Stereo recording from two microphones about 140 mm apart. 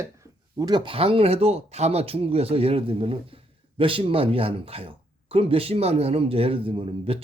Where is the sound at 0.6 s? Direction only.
35° right (ahead or behind).